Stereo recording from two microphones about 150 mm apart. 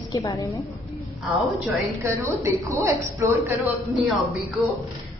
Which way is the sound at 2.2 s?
20° right (ahead or behind).